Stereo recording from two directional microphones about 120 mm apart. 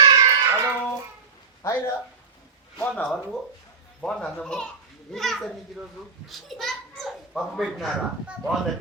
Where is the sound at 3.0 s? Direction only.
Centre (ahead or behind).